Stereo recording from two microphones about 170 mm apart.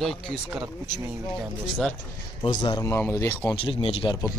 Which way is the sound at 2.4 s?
25° left (ahead or behind).